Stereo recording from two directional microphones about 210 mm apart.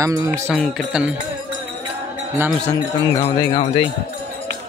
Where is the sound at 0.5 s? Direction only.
Centre (ahead or behind).